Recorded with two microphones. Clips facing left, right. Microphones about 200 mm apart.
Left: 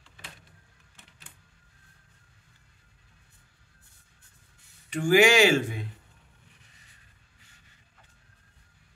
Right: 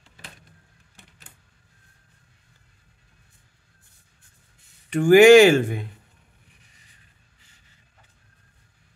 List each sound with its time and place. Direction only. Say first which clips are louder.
4.8 s speech: right 9 dB; 55° right (ahead or behind)